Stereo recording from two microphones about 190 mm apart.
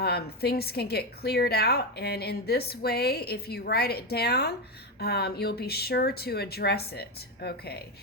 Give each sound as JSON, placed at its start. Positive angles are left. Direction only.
{"t": 0.0, "sound": "a woman's voice", "side_deg": 55}